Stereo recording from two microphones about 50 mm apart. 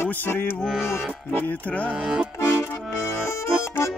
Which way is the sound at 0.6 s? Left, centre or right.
Centre.